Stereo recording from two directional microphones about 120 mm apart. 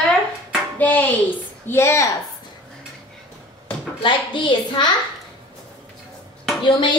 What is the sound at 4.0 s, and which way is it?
Speech, 40° left (ahead or behind).